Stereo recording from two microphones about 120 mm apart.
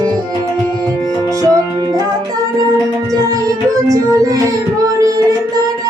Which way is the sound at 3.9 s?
30° right (ahead or behind).